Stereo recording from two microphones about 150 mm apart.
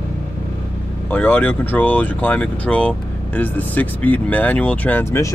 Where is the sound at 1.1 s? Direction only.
10° left (ahead or behind).